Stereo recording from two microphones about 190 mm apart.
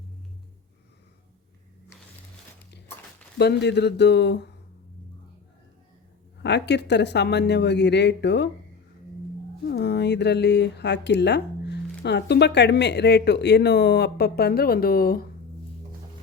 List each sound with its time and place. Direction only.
3.3 s speech: 60° left (ahead or behind)
6.4 s speech: 65° left (ahead or behind)
9.6 s speech: 60° left (ahead or behind)